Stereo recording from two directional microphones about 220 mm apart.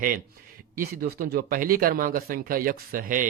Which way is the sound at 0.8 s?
40° right (ahead or behind).